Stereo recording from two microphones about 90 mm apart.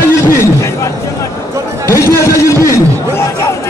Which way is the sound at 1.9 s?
30° left (ahead or behind).